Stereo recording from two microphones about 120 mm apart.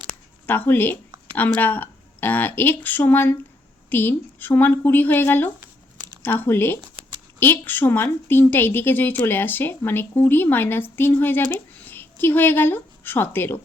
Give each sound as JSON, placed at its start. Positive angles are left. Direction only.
{"t": 0.4, "sound": "a woman's voice", "side_deg": 15}